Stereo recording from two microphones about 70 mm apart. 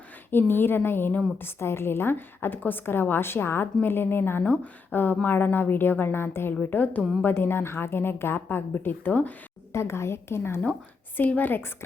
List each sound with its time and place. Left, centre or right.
0.3 s a woman's voice: left
9.7 s a woman's voice: left
11.2 s a woman's voice: left